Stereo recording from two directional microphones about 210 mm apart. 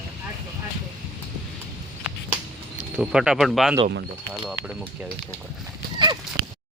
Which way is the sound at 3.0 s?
5° right (ahead or behind).